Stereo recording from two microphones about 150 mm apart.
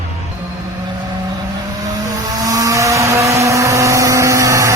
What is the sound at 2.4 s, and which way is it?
Vehicle, 25° right (ahead or behind).